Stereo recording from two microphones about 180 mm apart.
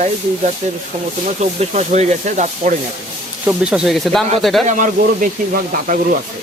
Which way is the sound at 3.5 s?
5° right (ahead or behind).